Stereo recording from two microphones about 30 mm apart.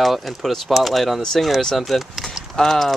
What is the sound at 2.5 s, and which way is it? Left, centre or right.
Speech, centre.